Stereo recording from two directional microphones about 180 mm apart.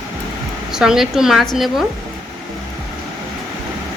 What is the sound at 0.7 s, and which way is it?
A woman's voice, 5° right (ahead or behind).